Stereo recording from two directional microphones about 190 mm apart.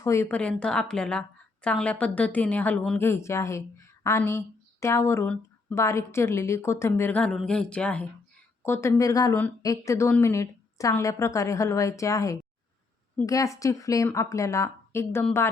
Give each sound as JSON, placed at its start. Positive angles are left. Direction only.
{"t": 0.0, "sound": "a woman's voice", "side_deg": 15}